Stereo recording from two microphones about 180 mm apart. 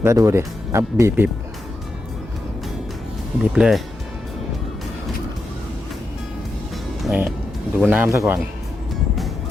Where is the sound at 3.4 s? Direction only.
5° right (ahead or behind).